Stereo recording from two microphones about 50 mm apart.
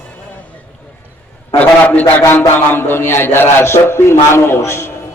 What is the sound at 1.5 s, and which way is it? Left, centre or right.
Speech, left.